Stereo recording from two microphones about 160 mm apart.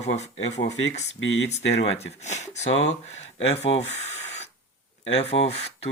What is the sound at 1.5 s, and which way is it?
Speech, 45° left (ahead or behind).